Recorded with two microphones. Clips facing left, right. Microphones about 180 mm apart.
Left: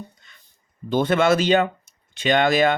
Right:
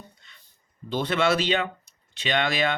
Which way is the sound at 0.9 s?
50° left (ahead or behind).